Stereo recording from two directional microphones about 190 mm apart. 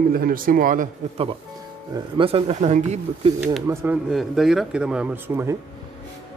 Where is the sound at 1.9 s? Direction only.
25° right (ahead or behind).